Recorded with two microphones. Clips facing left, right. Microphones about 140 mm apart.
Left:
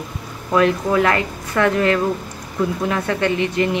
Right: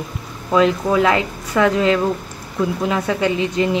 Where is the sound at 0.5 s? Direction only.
15° right (ahead or behind).